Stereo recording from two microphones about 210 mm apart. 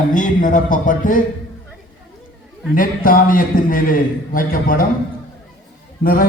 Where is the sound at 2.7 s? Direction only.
40° left (ahead or behind).